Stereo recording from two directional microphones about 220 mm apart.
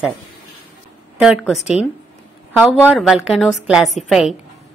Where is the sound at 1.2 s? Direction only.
5° right (ahead or behind).